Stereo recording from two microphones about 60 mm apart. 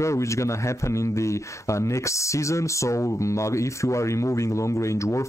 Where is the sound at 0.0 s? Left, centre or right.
Left.